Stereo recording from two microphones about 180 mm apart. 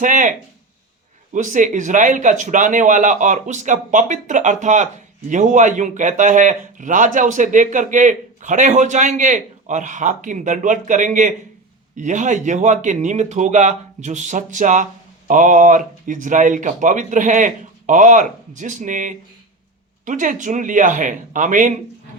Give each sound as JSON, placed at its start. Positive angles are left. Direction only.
{"t": 0.0, "sound": "speech", "side_deg": -45}